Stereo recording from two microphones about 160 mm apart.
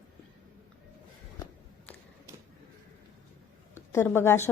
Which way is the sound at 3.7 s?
15° left (ahead or behind).